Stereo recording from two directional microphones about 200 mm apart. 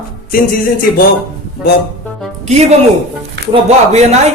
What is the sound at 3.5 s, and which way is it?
Speech, 30° right (ahead or behind).